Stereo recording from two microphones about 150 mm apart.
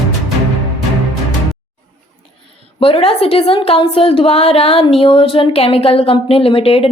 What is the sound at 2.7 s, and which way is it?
A woman's voice, 40° left (ahead or behind).